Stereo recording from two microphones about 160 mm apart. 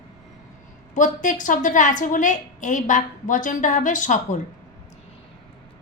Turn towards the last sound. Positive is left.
turn(degrees=50)  # may be behind; listen again after turning